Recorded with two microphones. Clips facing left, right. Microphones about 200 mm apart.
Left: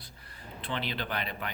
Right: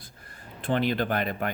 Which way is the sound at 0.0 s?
50° right (ahead or behind).